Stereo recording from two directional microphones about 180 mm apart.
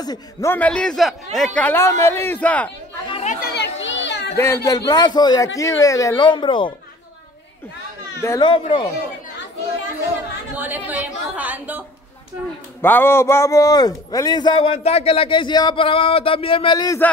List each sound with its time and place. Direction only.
0.0 s a man's voice: 20° left (ahead or behind)
3.1 s chatter: 35° left (ahead or behind)
3.3 s chatter: 65° left (ahead or behind)
3.8 s chatter: 85° left; by 4.4 s 70° left (ahead or behind)
4.6 s a man's voice: 20° left (ahead or behind)
8.2 s speech: 15° left (ahead or behind)
8.5 s a man's voice: 30° left (ahead or behind)
10.5 s a woman's voice: 10° right (ahead or behind)
12.8 s a man's voice: 10° left (ahead or behind)